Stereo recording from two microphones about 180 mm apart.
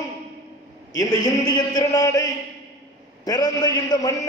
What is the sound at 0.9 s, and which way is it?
A man's voice, 20° left (ahead or behind).